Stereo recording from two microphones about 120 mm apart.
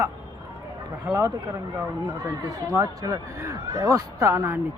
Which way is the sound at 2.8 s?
25° right (ahead or behind).